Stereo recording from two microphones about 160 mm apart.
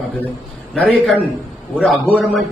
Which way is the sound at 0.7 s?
5° left (ahead or behind).